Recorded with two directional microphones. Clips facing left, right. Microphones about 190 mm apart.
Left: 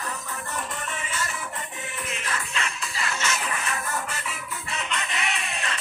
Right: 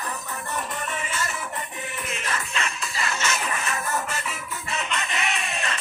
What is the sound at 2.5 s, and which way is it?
Music, 45° right (ahead or behind).